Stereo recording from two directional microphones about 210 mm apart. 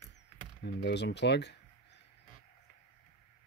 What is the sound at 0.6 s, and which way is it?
Speech, 55° left (ahead or behind).